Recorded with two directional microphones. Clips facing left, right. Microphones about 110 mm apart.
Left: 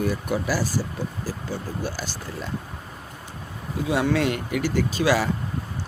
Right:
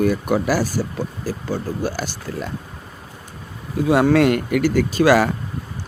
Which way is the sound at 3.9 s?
55° right (ahead or behind).